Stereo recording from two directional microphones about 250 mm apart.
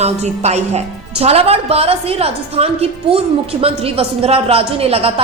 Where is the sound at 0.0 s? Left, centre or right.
Right.